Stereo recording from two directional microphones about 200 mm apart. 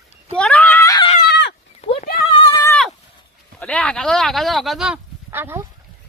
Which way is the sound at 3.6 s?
5° left (ahead or behind).